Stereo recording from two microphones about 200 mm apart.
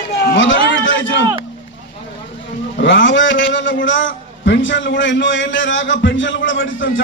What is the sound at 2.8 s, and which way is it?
A man's voice, 70° left (ahead or behind).